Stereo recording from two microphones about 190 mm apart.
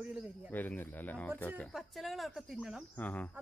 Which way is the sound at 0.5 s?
10° left (ahead or behind).